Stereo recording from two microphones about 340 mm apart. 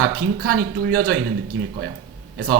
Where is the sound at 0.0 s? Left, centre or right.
Right.